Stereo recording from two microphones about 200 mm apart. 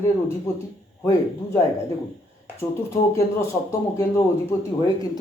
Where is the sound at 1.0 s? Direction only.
15° left (ahead or behind).